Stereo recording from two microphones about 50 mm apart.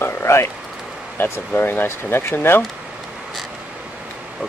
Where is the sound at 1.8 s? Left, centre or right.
Left.